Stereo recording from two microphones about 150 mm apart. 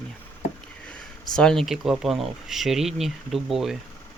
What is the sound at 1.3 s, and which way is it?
Speech, 5° left (ahead or behind).